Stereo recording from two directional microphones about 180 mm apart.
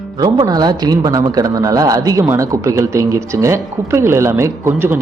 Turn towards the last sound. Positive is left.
turn(degrees=-15)  # may be behind; listen again after turning